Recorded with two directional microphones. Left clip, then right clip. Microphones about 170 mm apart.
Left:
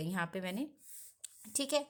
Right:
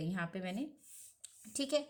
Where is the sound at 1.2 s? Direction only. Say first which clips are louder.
Left 1 dB; 40° left (ahead or behind).